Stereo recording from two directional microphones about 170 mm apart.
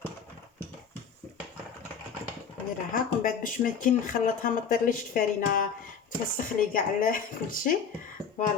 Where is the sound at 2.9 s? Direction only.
50° left (ahead or behind).